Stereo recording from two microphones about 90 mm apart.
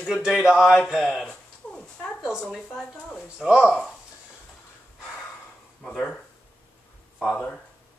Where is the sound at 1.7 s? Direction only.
10° left (ahead or behind).